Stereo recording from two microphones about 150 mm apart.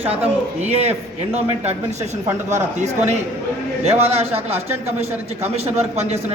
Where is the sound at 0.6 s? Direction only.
45° right (ahead or behind).